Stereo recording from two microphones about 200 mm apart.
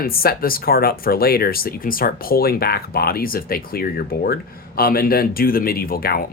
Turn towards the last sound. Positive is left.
turn(degrees=50)  # may be behind; listen again after turning